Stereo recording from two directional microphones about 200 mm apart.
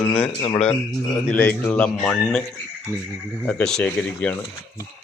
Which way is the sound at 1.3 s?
10° left (ahead or behind).